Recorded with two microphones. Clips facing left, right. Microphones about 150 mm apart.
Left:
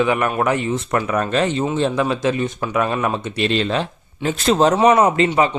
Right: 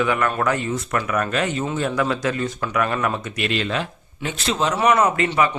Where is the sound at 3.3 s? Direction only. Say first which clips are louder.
Left 4 dB; 30° left (ahead or behind).